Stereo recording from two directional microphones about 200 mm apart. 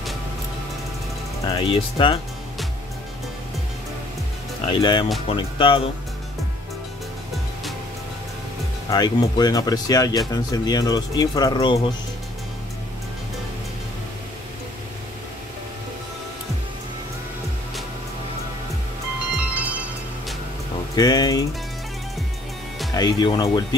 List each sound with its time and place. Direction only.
1.4 s speech: 20° left (ahead or behind)
4.6 s speech: 25° left (ahead or behind)
8.9 s speech: 20° left (ahead or behind)
20.9 s speech: 20° left (ahead or behind)
22.9 s speech: 20° left (ahead or behind)